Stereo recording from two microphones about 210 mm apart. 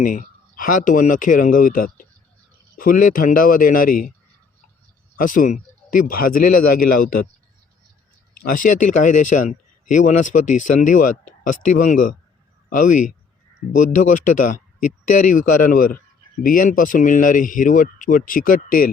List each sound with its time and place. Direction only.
0.0 s a man's voice: 40° left (ahead or behind)
5.1 s a man's voice: 40° left (ahead or behind)
8.4 s a man's voice: 40° left (ahead or behind)